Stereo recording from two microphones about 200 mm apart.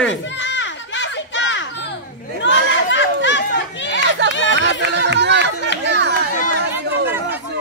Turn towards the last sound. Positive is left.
turn(degrees=-60)  # may be behind; listen again after turning